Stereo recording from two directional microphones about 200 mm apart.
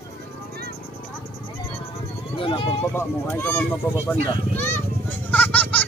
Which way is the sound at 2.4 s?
25° left (ahead or behind).